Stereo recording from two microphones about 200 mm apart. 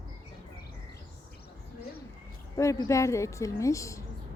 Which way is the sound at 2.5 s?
15° left (ahead or behind).